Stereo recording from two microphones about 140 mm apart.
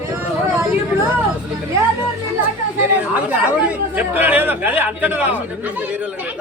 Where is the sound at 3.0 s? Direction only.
10° right (ahead or behind).